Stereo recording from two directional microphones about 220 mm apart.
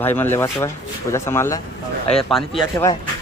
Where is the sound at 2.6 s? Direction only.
15° left (ahead or behind).